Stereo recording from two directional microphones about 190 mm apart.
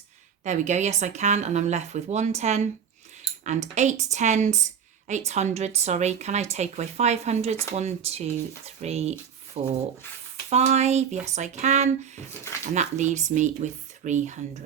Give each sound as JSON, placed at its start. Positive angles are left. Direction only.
{"t": 0.4, "sound": "a woman's voice", "side_deg": -40}